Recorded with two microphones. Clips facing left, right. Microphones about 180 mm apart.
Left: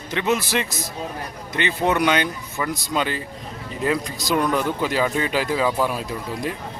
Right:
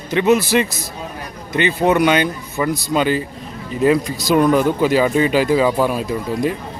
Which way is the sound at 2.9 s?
10° right (ahead or behind).